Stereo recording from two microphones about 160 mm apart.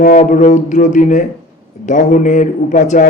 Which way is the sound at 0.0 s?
50° left (ahead or behind).